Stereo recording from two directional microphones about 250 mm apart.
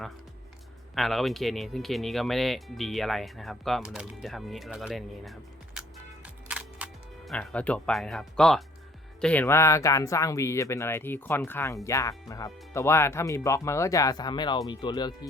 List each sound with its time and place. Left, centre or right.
0.9 s speech: centre
6.2 s camera: centre
9.2 s speech: centre